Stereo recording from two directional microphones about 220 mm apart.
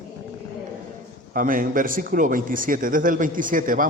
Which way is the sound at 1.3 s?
40° right (ahead or behind).